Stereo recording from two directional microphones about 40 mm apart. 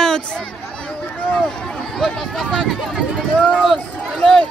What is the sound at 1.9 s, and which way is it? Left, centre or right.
Speech, centre.